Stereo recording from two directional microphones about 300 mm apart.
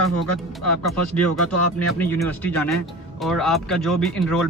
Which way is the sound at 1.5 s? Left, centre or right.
Left.